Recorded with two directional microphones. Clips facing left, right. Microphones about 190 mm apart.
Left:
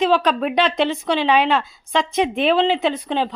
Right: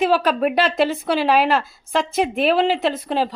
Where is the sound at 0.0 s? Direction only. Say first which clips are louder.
Even; 5° right (ahead or behind).